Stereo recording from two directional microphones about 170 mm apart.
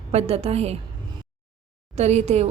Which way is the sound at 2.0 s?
40° right (ahead or behind).